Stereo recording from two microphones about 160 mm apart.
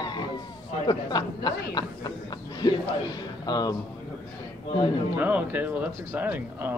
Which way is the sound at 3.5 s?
25° left (ahead or behind).